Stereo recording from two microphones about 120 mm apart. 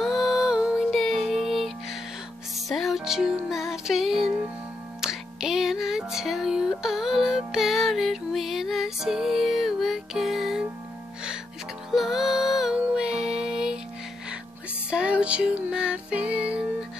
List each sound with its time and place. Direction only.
0.0 s music: centre (ahead or behind)
11.9 s music: 5° right (ahead or behind)
14.9 s music: 10° right (ahead or behind)